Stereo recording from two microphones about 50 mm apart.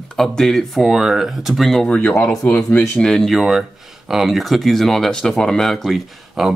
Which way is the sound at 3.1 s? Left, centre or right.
Centre.